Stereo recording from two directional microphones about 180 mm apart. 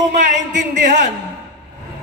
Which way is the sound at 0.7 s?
45° right (ahead or behind).